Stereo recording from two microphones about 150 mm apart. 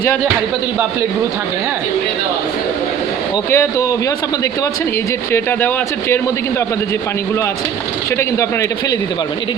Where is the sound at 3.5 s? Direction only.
20° left (ahead or behind).